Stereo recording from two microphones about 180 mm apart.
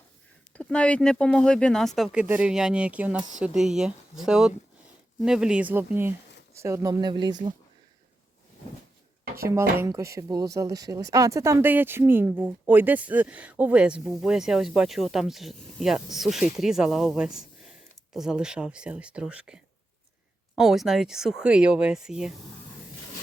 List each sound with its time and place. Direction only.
0.5 s speech: 5° left (ahead or behind); by 7.3 s 25° right (ahead or behind)
9.4 s speech: 15° right (ahead or behind)
20.6 s speech: centre (ahead or behind)